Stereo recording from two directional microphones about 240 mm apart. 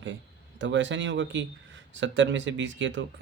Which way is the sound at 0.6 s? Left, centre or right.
Right.